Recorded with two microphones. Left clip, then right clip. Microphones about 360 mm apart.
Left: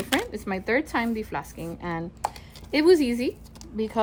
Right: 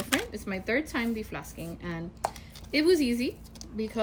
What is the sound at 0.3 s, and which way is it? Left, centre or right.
A woman's voice, centre.